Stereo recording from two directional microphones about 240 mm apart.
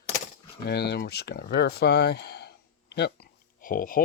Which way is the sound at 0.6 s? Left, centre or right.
Left.